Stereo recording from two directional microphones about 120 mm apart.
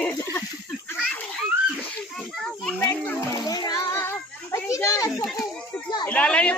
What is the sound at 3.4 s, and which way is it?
Music, 35° left (ahead or behind).